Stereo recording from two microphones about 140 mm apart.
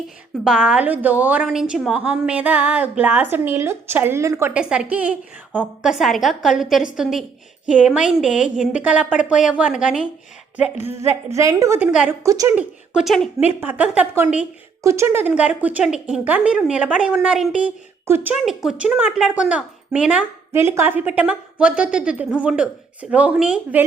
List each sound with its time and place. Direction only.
0.4 s a woman's voice: 5° right (ahead or behind)
4.5 s a woman's voice: 5° right (ahead or behind)
10.8 s a woman's voice: 15° right (ahead or behind)
11.8 s a woman's voice: 10° right (ahead or behind)
12.2 s a woman's voice: 25° right (ahead or behind)
12.5 s a woman's voice: 5° right (ahead or behind)
18.4 s a woman's voice: 5° right (ahead or behind)